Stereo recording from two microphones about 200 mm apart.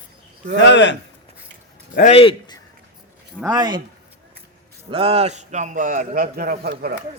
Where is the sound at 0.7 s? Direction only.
65° left (ahead or behind).